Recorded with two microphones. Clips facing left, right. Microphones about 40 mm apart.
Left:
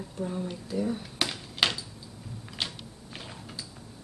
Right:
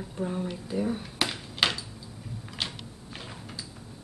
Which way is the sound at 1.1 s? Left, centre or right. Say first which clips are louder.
Right 1 dB; centre.